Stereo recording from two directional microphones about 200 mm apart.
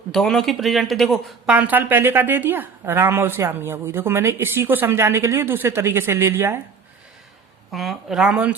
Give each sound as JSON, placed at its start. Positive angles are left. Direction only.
{"t": 0.1, "sound": "speech", "side_deg": 0}
{"t": 7.7, "sound": "speech", "side_deg": 0}